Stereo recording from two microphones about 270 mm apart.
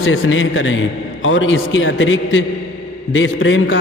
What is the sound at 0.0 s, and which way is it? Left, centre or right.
A man's voice, left.